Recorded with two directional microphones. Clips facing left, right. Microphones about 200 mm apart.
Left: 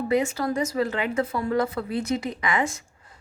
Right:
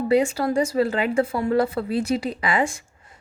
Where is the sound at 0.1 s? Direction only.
30° right (ahead or behind).